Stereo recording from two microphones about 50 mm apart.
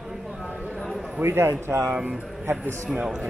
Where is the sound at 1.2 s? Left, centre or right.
Right.